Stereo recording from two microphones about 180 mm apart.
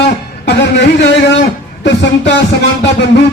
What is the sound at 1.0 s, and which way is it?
A man's voice, 75° left (ahead or behind).